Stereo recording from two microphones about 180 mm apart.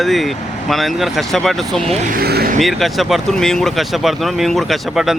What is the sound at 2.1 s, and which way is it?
Speech, 55° right (ahead or behind).